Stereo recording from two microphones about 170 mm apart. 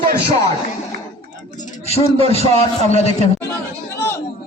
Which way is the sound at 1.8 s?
40° left (ahead or behind).